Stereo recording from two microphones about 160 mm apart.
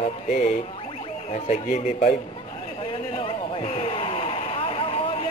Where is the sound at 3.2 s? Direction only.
35° left (ahead or behind).